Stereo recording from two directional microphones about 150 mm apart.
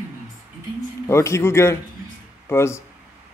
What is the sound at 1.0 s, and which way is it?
A man's voice, 20° left (ahead or behind).